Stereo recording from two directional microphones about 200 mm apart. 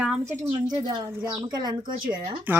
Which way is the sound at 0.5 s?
25° right (ahead or behind).